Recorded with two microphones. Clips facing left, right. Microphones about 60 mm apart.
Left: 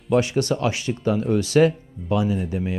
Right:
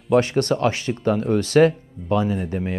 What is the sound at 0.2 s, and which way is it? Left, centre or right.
Speech, right.